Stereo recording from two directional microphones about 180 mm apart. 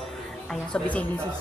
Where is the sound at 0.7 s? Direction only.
10° left (ahead or behind).